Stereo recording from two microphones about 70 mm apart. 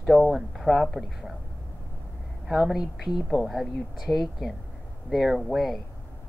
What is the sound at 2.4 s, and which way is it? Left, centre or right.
A woman's voice, centre.